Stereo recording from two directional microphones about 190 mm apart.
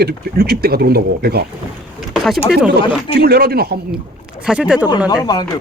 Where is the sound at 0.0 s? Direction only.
55° right (ahead or behind).